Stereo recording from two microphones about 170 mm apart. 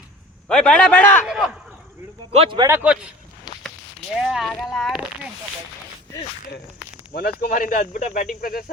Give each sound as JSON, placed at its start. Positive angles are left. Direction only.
{"t": 0.4, "sound": "a man's voice", "side_deg": 5}
{"t": 1.2, "sound": "speech", "side_deg": -5}
{"t": 2.3, "sound": "a man's voice", "side_deg": -35}
{"t": 2.6, "sound": "a man's voice", "side_deg": -15}
{"t": 4.1, "sound": "speech", "side_deg": -5}
{"t": 7.1, "sound": "speech", "side_deg": 65}